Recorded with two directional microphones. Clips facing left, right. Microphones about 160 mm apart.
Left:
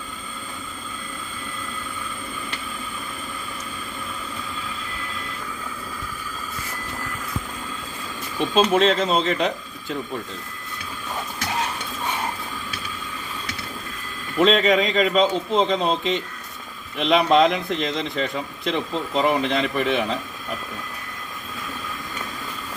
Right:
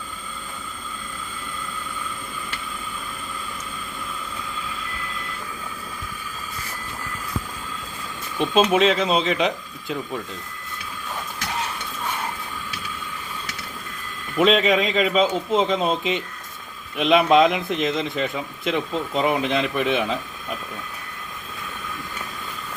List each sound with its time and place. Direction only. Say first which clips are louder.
8.4 s a man's voice: even; 5° right (ahead or behind)
14.3 s a man's voice: even; 5° right (ahead or behind)